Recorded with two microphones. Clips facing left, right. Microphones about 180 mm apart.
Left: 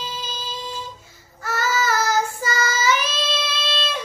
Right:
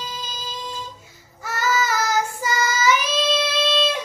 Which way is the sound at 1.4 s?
15° right (ahead or behind).